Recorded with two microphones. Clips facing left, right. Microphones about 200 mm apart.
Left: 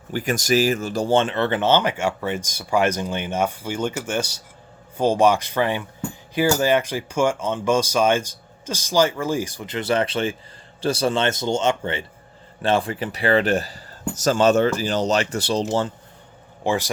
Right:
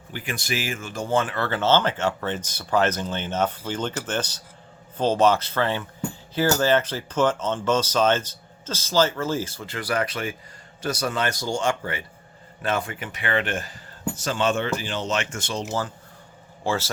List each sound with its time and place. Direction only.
0.1 s speech: 45° left (ahead or behind)
16.6 s speech: 15° left (ahead or behind)